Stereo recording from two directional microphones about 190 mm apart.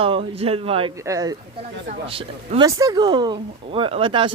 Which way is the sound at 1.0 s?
20° right (ahead or behind).